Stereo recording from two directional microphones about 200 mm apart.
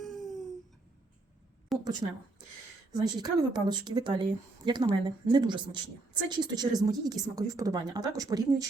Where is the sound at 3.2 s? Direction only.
20° right (ahead or behind).